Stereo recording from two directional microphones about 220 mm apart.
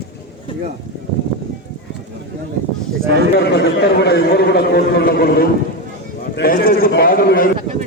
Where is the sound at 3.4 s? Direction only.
50° left (ahead or behind).